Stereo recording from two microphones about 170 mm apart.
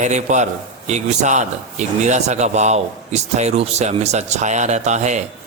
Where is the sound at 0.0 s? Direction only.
45° right (ahead or behind).